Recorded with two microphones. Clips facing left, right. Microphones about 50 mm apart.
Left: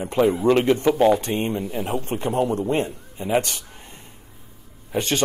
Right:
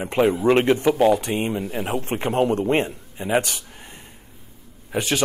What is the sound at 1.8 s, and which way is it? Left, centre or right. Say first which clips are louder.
A man's voice: right 1 dB; right.